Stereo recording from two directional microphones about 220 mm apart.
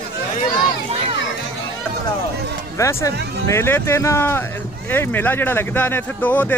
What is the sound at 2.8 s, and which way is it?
Speech, 15° left (ahead or behind).